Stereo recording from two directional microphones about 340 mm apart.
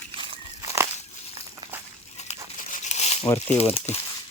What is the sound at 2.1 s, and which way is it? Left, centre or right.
Crumpling, left.